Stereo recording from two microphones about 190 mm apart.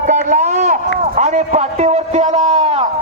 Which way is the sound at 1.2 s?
40° right (ahead or behind).